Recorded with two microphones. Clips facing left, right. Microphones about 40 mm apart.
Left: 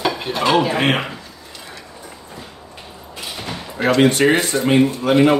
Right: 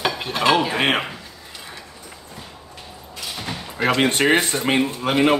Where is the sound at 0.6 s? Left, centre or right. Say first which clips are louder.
Left 3 dB; centre.